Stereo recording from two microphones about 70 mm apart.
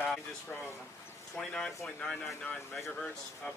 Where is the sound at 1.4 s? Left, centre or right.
Centre.